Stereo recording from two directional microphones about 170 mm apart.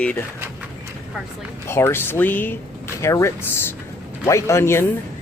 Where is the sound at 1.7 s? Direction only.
15° left (ahead or behind).